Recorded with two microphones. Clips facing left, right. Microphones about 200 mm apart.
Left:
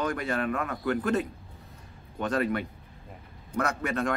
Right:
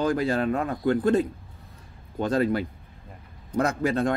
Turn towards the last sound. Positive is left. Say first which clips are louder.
# right 5 dB
turn(degrees=-30)  # may be behind; listen again after turning